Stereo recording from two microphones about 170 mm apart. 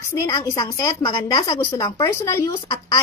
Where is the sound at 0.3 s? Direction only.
20° left (ahead or behind).